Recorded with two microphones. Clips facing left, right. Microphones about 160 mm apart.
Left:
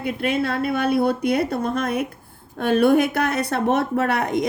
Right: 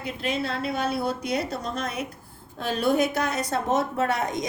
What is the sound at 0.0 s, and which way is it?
Speech, 60° left (ahead or behind).